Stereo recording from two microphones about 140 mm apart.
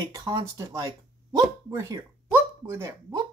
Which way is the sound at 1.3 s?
20° right (ahead or behind).